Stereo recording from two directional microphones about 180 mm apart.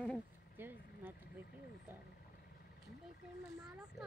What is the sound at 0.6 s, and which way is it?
Speech, 10° right (ahead or behind).